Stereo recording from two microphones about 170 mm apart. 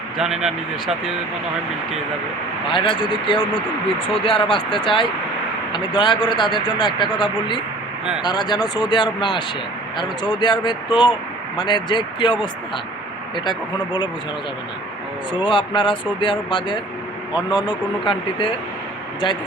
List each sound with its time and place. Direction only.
0.2 s speech: 5° right (ahead or behind)
2.7 s speech: 30° left (ahead or behind)
15.4 s speech: 30° left (ahead or behind)